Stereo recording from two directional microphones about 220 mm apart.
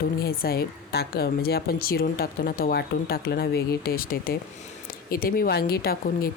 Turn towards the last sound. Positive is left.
turn(degrees=45)  # may be behind; listen again after turning